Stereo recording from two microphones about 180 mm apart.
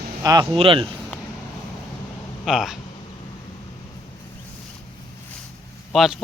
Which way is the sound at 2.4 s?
Centre (ahead or behind).